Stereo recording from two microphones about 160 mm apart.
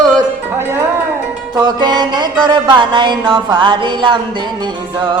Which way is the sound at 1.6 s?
25° right (ahead or behind).